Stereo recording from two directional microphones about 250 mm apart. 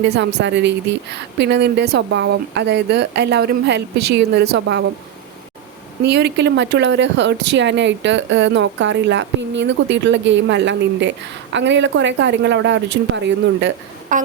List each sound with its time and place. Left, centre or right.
0.0 s speech: right
6.1 s speech: right
14.1 s a sound: right